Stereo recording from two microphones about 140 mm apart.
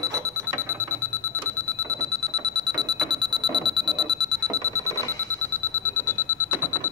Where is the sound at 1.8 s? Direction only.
25° right (ahead or behind).